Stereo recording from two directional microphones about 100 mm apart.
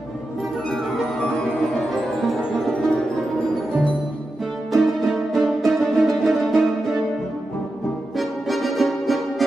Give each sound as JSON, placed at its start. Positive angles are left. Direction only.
{"t": 2.0, "sound": "music", "side_deg": 5}
{"t": 4.7, "sound": "music", "side_deg": 0}
{"t": 8.2, "sound": "music", "side_deg": 0}